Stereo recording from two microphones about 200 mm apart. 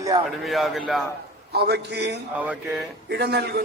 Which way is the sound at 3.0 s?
55° right (ahead or behind).